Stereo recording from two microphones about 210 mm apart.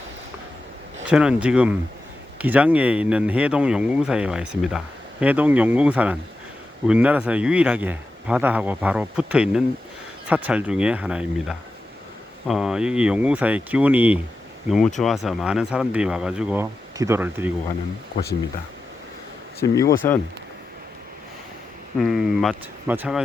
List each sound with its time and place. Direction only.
1.1 s speech: 5° right (ahead or behind)
19.5 s speech: 15° left (ahead or behind)
21.9 s speech: centre (ahead or behind)